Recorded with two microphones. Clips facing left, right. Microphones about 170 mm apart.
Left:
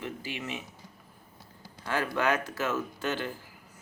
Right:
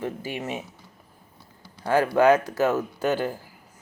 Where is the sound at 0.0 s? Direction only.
45° right (ahead or behind).